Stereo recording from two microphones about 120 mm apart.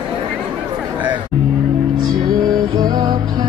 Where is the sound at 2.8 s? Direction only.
35° right (ahead or behind).